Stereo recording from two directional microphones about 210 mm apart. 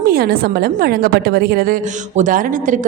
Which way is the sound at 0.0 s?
45° right (ahead or behind).